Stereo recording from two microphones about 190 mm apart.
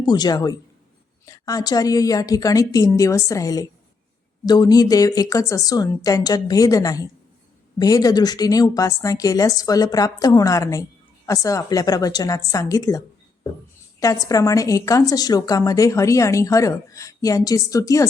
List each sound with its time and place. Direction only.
0.0 s a woman's voice: 20° left (ahead or behind)
14.0 s a woman's voice: 15° left (ahead or behind)